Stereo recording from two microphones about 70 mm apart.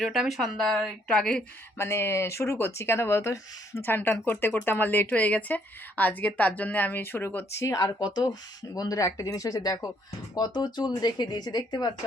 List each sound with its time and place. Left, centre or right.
0.0 s speech: centre
1.8 s speech: left
7.9 s speech: left
10.3 s speech: left